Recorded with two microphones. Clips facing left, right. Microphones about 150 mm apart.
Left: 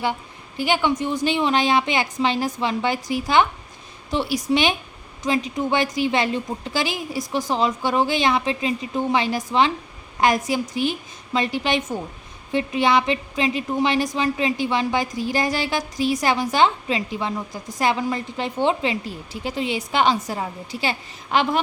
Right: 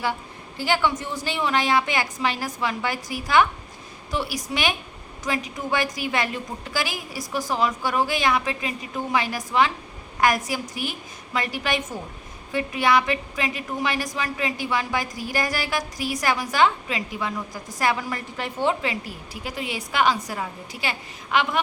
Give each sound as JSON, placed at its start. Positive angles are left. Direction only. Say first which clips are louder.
{"t": 0.0, "sound": "a woman's voice", "louder": "left 2 dB", "side_deg": 20}